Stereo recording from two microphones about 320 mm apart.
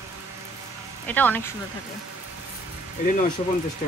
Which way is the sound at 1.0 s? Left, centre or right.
Centre.